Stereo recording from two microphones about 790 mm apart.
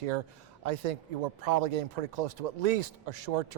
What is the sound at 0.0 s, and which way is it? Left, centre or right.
Speech, right.